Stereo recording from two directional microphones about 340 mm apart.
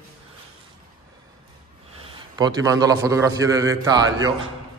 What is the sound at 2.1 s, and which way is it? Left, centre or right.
A man's voice, centre.